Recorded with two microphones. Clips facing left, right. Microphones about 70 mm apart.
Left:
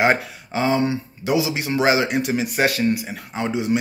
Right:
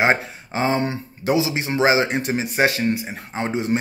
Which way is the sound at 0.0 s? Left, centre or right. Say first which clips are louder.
Even; right.